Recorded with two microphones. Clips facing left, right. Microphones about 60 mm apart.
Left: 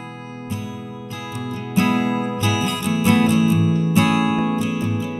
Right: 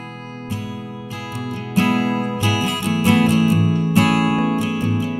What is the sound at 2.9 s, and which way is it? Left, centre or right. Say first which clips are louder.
Music: right 1 dB; right.